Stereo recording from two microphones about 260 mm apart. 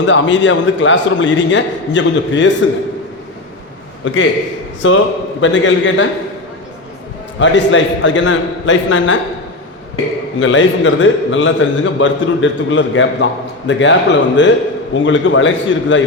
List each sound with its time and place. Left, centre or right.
0.0 s a man's voice: left
4.0 s a man's voice: left
7.3 s a man's voice: left
10.4 s a man's voice: left